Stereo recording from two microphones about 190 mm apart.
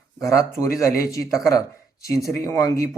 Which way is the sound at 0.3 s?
15° left (ahead or behind).